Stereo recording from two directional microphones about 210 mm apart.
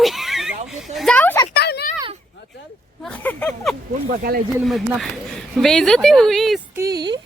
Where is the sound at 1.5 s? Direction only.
50° left (ahead or behind).